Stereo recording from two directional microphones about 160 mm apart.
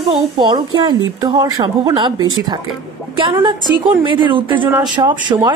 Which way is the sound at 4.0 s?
30° right (ahead or behind).